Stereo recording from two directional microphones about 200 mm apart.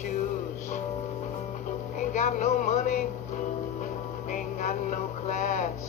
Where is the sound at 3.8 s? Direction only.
35° left (ahead or behind).